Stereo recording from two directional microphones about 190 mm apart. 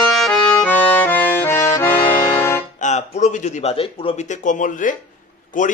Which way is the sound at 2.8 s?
40° left (ahead or behind).